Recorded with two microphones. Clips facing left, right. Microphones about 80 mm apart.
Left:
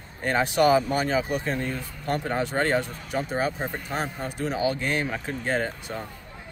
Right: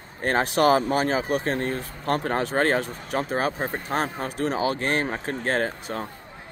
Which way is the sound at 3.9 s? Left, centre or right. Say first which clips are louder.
Right 3 dB; right.